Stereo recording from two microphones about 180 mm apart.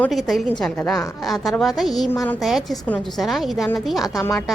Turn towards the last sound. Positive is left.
turn(degrees=0)  # may be behind; listen again after turning